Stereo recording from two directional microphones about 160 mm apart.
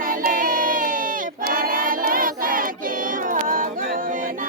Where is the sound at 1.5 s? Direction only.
60° right (ahead or behind).